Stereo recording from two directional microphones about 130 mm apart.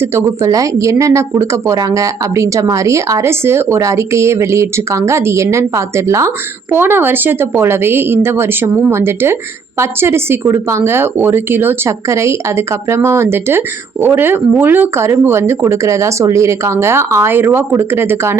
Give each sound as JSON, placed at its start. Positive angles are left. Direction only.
{"t": 0.0, "sound": "speech", "side_deg": -20}